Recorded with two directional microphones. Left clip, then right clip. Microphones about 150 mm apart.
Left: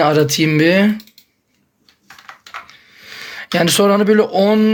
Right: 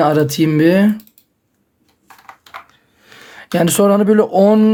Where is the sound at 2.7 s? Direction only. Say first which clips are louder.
Left 8 dB; 30° right (ahead or behind).